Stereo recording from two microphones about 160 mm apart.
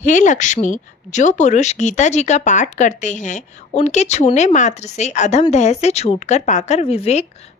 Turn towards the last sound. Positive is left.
turn(degrees=40)  # may be behind; listen again after turning